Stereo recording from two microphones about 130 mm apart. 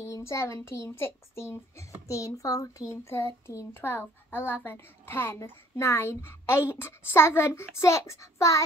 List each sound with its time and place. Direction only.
0.0 s a child's voice: 20° left (ahead or behind)